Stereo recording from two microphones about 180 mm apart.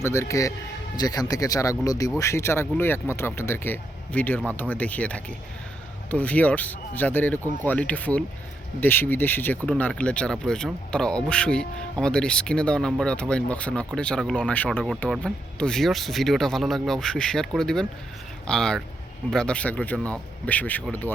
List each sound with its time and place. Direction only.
0.0 s speech: 15° left (ahead or behind)